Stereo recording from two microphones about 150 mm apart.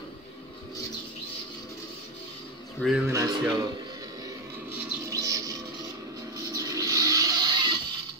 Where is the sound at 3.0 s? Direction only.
20° right (ahead or behind).